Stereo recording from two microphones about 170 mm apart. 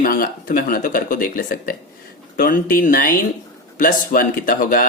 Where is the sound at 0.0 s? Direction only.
55° left (ahead or behind).